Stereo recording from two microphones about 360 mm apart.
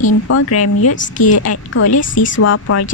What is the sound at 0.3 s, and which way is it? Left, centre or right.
A woman's voice, left.